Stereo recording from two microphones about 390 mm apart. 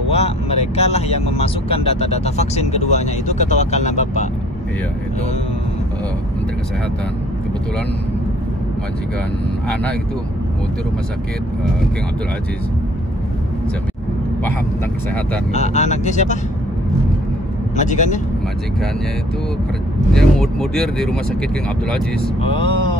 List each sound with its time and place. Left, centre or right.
0.1 s speech: centre
15.5 s speech: centre
17.7 s speech: centre
20.2 s speech: centre
22.4 s speech: centre